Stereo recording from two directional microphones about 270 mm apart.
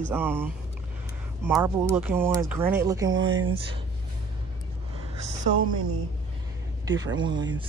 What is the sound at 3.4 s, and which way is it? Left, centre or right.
Speech, centre.